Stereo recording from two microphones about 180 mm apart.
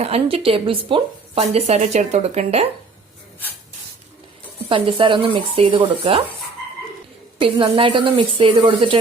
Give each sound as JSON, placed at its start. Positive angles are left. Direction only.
{"t": 0.0, "sound": "speech", "side_deg": -35}
{"t": 4.7, "sound": "speech", "side_deg": -30}
{"t": 7.3, "sound": "speech", "side_deg": -30}